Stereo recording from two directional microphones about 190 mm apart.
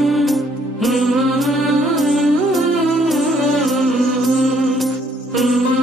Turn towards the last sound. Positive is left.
turn(degrees=0)  # may be behind; listen again after turning